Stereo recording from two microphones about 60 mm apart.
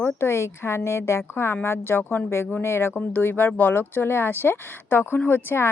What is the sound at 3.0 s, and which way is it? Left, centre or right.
A woman's voice, left.